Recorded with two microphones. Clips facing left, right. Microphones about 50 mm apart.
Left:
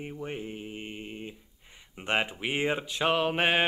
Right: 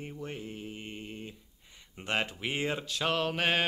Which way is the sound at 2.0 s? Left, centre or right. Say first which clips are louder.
Left 3 dB; centre.